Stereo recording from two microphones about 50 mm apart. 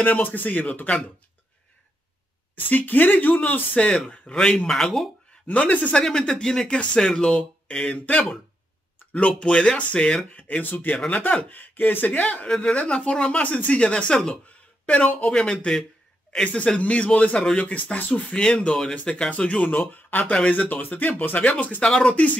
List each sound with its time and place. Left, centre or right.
0.0 s speech: left
2.5 s speech: left; by 5.1 s centre
5.5 s speech: left
6.0 s speech: centre
7.9 s speech: left
10.6 s speech: left
12.4 s speech: centre
12.7 s speech: left
15.3 s speech: centre
16.5 s speech: left
18.3 s speech: left
21.8 s speech: centre
22.1 s speech: left